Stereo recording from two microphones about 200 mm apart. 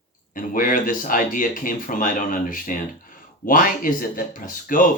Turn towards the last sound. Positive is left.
turn(degrees=40)  # may be behind; listen again after turning